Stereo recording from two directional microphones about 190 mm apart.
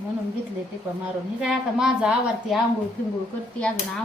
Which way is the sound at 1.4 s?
5° right (ahead or behind).